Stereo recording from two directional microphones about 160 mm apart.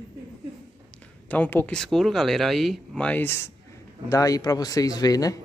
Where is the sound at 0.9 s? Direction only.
10° left (ahead or behind).